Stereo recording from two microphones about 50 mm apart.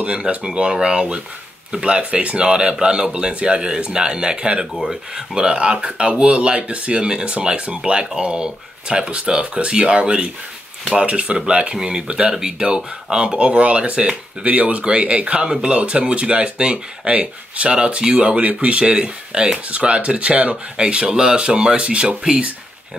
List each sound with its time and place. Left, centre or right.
0.0 s speech: right